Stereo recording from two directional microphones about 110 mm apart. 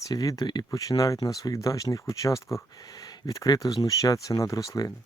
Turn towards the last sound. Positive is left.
turn(degrees=35)  # may be behind; listen again after turning